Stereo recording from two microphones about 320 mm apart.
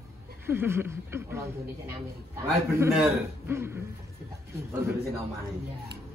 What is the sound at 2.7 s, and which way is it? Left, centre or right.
A man's voice, centre.